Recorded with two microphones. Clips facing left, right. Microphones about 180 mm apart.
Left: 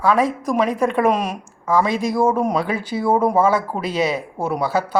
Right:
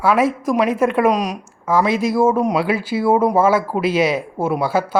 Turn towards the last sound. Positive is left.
turn(degrees=-10)  # may be behind; listen again after turning